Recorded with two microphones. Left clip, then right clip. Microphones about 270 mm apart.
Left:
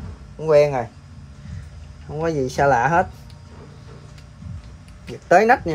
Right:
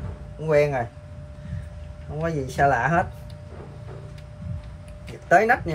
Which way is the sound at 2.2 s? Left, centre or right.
Left.